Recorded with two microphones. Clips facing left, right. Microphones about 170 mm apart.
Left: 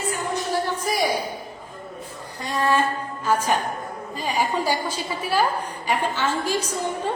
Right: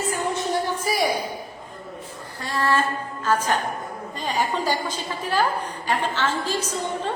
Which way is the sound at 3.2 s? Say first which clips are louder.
Left 1 dB; 10° left (ahead or behind).